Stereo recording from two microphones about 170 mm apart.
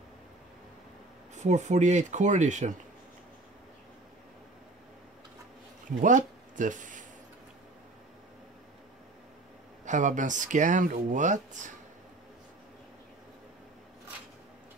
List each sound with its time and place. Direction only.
1.3 s speech: 45° right (ahead or behind)
5.9 s speech: 50° right (ahead or behind)
9.8 s speech: 45° right (ahead or behind)